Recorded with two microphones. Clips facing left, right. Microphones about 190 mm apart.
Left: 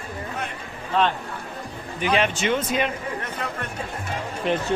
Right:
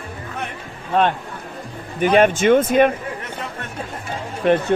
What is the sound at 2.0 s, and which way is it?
Speech, 50° right (ahead or behind).